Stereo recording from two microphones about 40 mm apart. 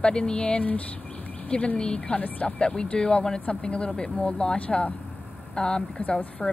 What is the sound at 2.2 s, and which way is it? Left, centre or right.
Speech, left.